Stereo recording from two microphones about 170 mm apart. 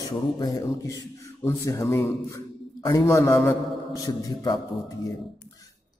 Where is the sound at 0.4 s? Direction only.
20° left (ahead or behind).